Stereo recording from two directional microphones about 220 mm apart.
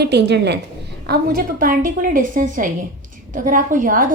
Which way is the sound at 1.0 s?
40° right (ahead or behind).